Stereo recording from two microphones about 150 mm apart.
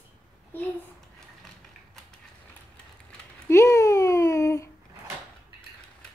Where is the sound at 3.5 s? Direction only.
20° left (ahead or behind).